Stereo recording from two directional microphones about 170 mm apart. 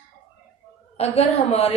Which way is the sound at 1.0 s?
35° left (ahead or behind).